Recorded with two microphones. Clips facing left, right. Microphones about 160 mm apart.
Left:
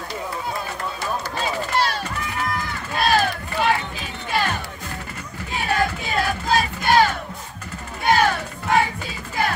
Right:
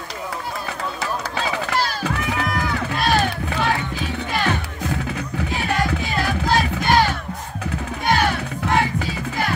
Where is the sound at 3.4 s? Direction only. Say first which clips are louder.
Even; 90° right.